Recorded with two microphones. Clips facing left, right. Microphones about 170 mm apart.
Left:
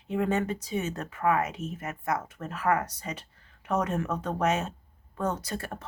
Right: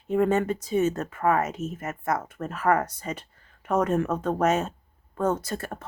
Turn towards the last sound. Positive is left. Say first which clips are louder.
# right 3 dB
turn(degrees=-45)  # may be behind; listen again after turning